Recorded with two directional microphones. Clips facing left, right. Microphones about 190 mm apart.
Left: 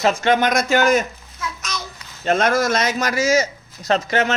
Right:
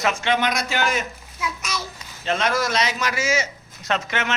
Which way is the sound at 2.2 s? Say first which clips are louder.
Left 5 dB; 45° left (ahead or behind).